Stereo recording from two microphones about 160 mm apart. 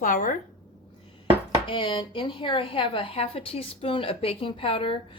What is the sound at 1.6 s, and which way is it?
Speech, 30° left (ahead or behind).